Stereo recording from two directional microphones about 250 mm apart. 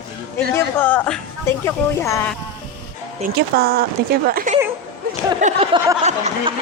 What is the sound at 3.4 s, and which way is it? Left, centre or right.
Speech, right.